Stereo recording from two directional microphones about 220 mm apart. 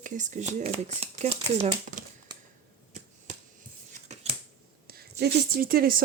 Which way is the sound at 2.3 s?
20° right (ahead or behind).